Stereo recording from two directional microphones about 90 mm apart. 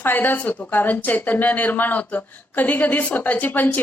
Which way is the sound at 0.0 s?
20° left (ahead or behind).